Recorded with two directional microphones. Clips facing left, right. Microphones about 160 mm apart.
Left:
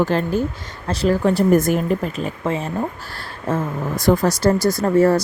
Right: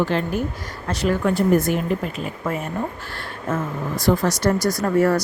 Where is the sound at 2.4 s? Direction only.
25° left (ahead or behind).